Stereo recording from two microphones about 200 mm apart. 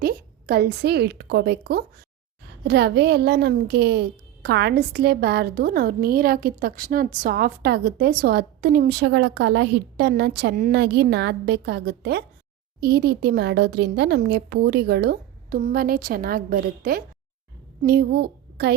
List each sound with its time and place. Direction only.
0.0 s a woman's voice: 50° right (ahead or behind)